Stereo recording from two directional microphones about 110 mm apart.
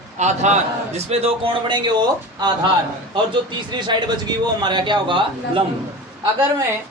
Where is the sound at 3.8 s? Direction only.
40° right (ahead or behind).